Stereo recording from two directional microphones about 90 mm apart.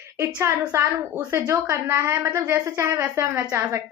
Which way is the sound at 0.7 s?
30° right (ahead or behind).